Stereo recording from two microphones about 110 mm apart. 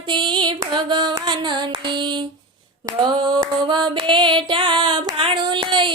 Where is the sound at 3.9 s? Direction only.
50° right (ahead or behind).